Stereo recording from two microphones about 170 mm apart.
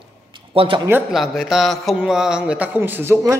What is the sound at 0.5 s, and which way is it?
Speech, 30° right (ahead or behind).